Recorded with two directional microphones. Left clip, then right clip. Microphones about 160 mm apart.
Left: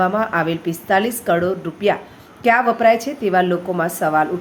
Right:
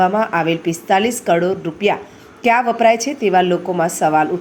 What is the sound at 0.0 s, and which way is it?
A woman's voice, 10° right (ahead or behind).